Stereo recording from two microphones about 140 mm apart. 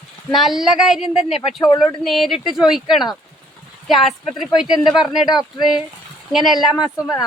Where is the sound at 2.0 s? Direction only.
Centre (ahead or behind).